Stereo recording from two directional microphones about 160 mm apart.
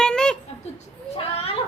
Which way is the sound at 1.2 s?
40° left (ahead or behind).